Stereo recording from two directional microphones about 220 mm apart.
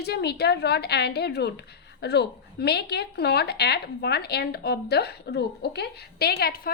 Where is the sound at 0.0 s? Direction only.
45° left (ahead or behind).